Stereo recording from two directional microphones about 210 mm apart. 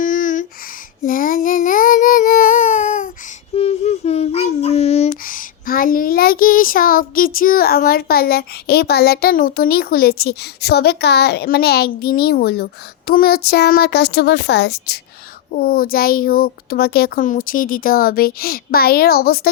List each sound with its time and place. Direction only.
0.0 s a sound: 40° left (ahead or behind)
1.0 s child singing: 40° left (ahead or behind)
3.5 s a child's voice: 30° left (ahead or behind); by 19.4 s 45° left (ahead or behind)